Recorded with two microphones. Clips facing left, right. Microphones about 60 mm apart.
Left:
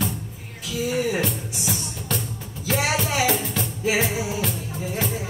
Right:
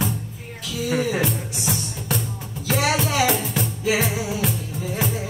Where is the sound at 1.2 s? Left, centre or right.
Centre.